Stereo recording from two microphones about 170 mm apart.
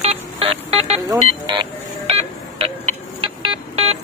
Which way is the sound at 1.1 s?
25° right (ahead or behind).